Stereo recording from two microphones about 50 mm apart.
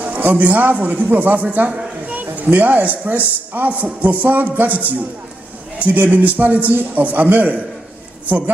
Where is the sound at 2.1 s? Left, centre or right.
Right.